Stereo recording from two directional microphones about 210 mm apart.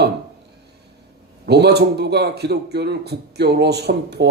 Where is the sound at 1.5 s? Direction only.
50° right (ahead or behind).